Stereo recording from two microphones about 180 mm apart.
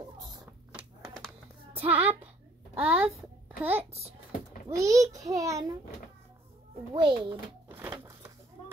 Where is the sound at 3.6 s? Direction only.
10° right (ahead or behind).